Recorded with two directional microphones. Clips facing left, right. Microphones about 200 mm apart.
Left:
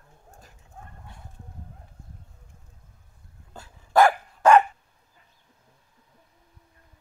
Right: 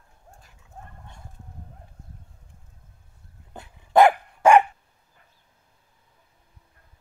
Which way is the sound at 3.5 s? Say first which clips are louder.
Right 2 dB; 20° right (ahead or behind).